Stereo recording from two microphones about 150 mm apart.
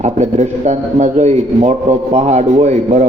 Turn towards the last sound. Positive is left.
turn(degrees=-50)  # may be behind; listen again after turning